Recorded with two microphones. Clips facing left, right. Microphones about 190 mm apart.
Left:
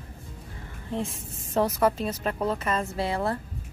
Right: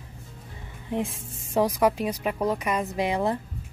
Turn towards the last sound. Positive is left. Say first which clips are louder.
# right 2 dB
turn(degrees=-15)  # may be behind; listen again after turning